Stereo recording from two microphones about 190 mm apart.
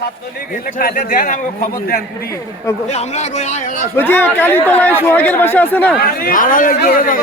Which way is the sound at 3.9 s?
10° left (ahead or behind).